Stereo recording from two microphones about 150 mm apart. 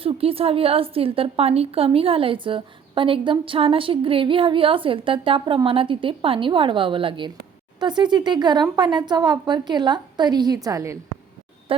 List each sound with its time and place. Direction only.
0.0 s a woman's voice: 40° right (ahead or behind); by 10.9 s 20° right (ahead or behind)